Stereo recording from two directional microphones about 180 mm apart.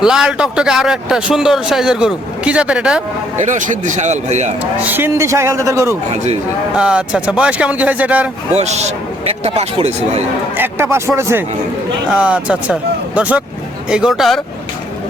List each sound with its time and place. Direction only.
0.0 s a man's voice: 5° right (ahead or behind)
3.3 s speech: 40° right (ahead or behind)
4.6 s speech: 10° right (ahead or behind)
6.7 s speech: 5° right (ahead or behind)
8.5 s speech: 40° right (ahead or behind)
10.6 s a man's voice: 15° right (ahead or behind)